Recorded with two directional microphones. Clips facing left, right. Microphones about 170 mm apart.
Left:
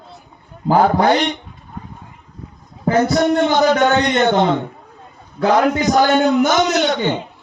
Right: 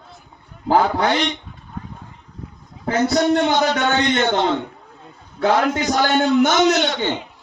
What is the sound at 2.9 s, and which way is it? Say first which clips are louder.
A man's voice: left 2 dB; 50° left (ahead or behind).